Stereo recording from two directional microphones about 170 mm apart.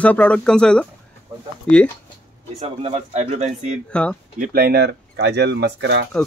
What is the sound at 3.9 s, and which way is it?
Speech, 5° left (ahead or behind).